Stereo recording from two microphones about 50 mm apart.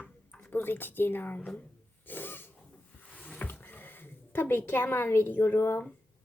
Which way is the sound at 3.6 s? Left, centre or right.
Left.